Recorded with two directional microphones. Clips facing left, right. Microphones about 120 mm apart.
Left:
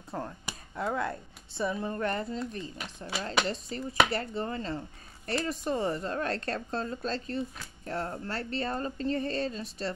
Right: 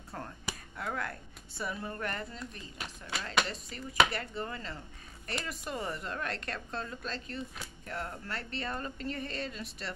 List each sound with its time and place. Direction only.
0.1 s a woman's voice: 25° left (ahead or behind)